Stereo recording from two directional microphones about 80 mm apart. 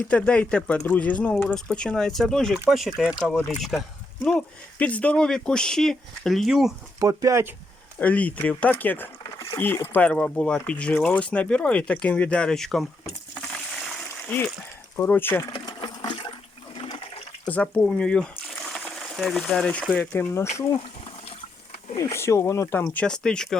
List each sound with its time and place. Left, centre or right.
0.1 s speech: centre
7.0 s speech: right
7.9 s speech: centre
9.2 s a sound: left
9.6 s speech: left
10.1 s speech: centre
13.8 s a sound: centre
14.9 s speech: left
15.8 s toilet flush: left
17.5 s speech: centre
20.1 s speech: left
21.9 s speech: left
22.8 s speech: left
23.0 s speech: centre